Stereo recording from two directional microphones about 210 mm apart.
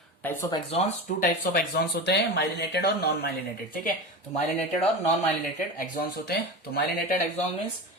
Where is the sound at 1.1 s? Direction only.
40° left (ahead or behind).